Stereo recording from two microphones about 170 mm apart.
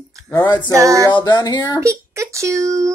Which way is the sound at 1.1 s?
25° left (ahead or behind).